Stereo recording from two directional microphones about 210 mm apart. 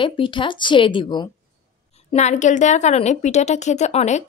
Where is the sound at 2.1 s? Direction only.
35° left (ahead or behind).